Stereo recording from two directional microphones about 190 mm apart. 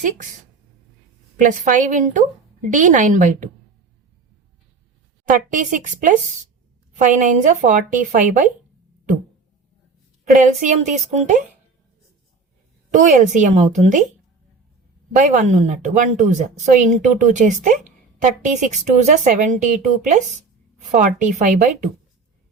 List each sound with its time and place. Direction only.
1.4 s a woman's voice: 45° right (ahead or behind)
5.3 s a woman's voice: 45° right (ahead or behind)
10.3 s a woman's voice: 40° right (ahead or behind)
12.9 s a woman's voice: 40° right (ahead or behind)
15.1 s a woman's voice: 40° right (ahead or behind)